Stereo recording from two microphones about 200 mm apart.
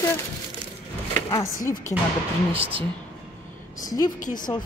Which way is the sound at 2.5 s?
30° right (ahead or behind).